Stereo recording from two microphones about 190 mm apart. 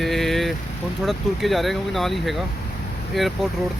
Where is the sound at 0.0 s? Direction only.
Centre (ahead or behind).